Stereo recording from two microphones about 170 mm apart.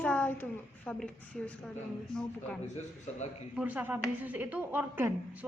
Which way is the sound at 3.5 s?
10° right (ahead or behind).